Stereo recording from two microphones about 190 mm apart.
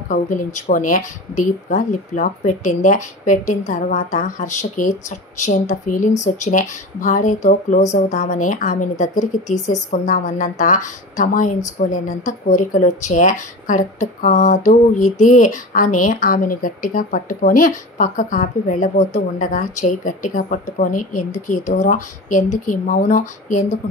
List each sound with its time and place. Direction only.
0.1 s speech: 45° left (ahead or behind)